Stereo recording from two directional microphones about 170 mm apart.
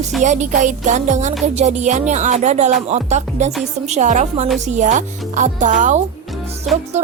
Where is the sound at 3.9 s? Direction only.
45° right (ahead or behind).